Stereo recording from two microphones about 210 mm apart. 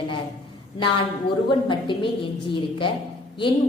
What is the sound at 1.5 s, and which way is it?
A woman's voice, 20° left (ahead or behind).